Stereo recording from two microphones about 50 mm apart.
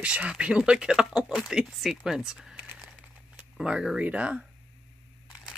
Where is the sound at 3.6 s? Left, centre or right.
Centre.